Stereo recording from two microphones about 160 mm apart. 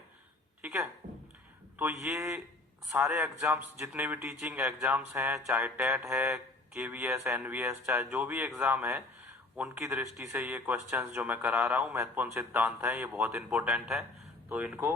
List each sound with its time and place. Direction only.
0.6 s a man's voice: 15° right (ahead or behind)